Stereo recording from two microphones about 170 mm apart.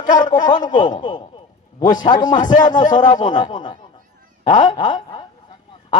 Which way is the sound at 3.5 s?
25° left (ahead or behind).